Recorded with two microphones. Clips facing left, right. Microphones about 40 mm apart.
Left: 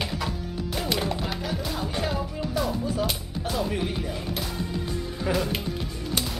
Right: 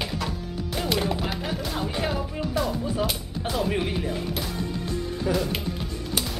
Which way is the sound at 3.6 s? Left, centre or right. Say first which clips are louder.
Right 3 dB; right.